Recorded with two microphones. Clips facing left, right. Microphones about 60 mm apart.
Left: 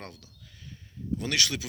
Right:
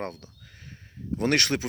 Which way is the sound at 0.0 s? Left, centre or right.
Right.